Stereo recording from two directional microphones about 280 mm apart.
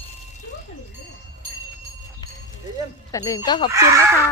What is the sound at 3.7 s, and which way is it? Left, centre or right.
Speech, centre.